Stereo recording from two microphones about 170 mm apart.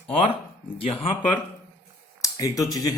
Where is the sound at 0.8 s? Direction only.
30° left (ahead or behind).